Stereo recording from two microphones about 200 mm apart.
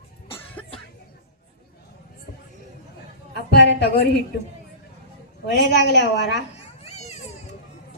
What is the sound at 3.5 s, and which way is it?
Speech, 55° left (ahead or behind).